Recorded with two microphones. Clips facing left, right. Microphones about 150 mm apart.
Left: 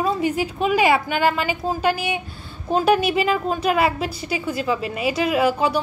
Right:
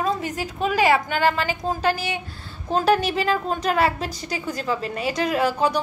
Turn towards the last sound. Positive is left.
turn(degrees=10)  # may be behind; listen again after turning